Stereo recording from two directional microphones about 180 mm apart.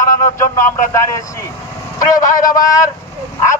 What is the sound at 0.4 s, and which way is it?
Speech, 15° left (ahead or behind).